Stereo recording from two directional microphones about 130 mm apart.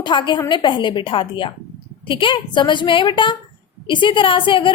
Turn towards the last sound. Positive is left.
turn(degrees=40)  # may be behind; listen again after turning